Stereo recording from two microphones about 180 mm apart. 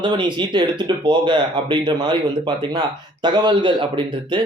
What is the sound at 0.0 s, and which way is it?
Speech, 25° right (ahead or behind).